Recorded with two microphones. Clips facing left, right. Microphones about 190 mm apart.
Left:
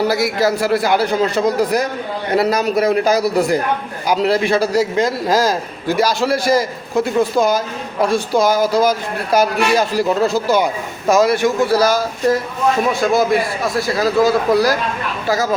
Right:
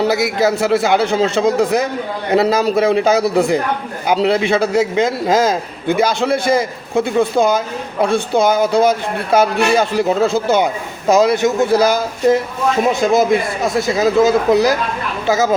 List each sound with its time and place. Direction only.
0.0 s a man's voice: 20° right (ahead or behind)